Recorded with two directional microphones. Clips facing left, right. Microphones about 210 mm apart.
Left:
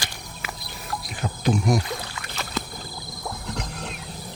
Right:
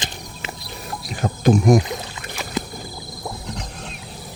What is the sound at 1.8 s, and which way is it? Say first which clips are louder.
Boat: right 3 dB; 20° right (ahead or behind).